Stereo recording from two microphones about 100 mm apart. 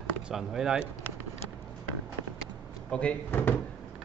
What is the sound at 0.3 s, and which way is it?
Speech, 5° right (ahead or behind).